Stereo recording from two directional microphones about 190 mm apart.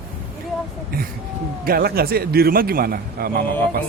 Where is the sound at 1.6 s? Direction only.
55° right (ahead or behind).